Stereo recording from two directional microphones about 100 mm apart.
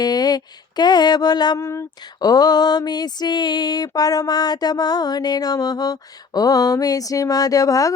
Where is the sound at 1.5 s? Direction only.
30° left (ahead or behind).